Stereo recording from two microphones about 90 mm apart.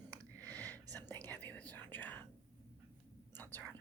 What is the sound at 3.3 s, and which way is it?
Whispering, 20° left (ahead or behind).